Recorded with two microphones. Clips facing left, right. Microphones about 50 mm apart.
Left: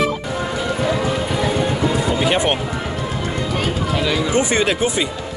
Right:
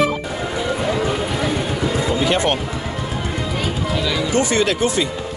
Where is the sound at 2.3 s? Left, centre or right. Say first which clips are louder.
Right 1 dB; centre.